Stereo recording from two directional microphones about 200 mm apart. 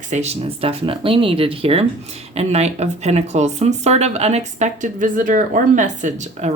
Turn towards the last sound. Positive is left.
turn(degrees=-40)  # may be behind; listen again after turning